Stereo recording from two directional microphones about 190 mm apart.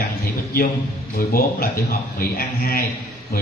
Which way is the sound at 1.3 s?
50° left (ahead or behind).